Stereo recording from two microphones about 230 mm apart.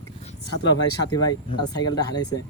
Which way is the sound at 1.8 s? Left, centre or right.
Centre.